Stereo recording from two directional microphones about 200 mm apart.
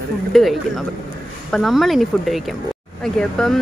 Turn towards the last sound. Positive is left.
turn(degrees=5)  # may be behind; listen again after turning